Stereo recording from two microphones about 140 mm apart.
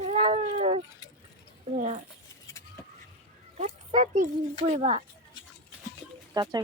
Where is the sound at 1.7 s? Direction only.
60° right (ahead or behind).